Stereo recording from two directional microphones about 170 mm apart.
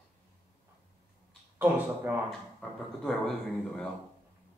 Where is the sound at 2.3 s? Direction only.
5° left (ahead or behind).